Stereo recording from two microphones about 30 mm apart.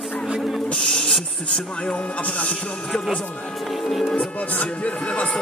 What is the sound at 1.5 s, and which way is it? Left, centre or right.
Speech, left.